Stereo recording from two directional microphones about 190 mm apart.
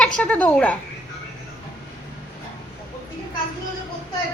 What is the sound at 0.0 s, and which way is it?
Speech, 5° left (ahead or behind).